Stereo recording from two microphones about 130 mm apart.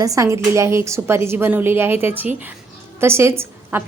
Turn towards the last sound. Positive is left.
turn(degrees=-20)  # may be behind; listen again after turning